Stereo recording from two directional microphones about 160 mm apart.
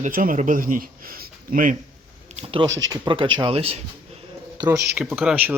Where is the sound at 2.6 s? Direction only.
25° right (ahead or behind).